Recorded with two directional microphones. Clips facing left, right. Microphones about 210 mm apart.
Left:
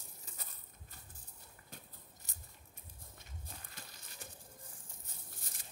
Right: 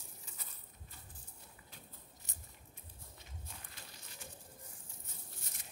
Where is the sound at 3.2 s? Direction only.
40° left (ahead or behind).